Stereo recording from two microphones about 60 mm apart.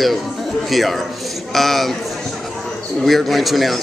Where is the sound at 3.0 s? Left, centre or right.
Centre.